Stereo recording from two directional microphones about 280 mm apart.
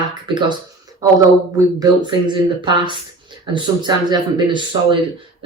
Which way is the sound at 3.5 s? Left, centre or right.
Centre.